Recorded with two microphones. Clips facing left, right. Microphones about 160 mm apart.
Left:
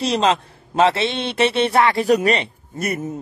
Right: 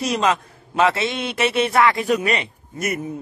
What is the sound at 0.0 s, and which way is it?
A man's voice, 30° left (ahead or behind).